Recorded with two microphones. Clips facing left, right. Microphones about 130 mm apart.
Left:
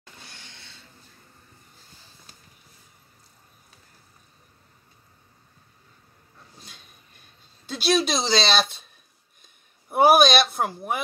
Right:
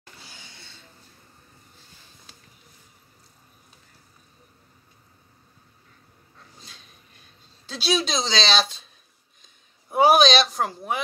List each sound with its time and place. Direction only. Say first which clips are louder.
0.2 s a sound: left 1 dB; 5° right (ahead or behind)
7.6 s speech: left 3 dB; 5° left (ahead or behind)
9.8 s speech: even; 5° left (ahead or behind)